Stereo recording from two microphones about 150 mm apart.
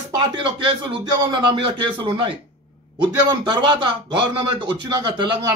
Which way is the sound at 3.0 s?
30° right (ahead or behind).